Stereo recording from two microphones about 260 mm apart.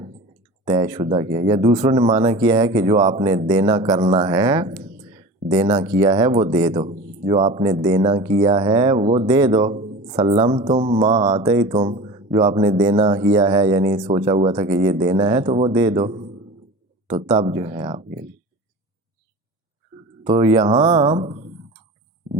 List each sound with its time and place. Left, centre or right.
0.6 s speech: centre
19.9 s a sound: right
20.2 s speech: centre
21.1 s speech: right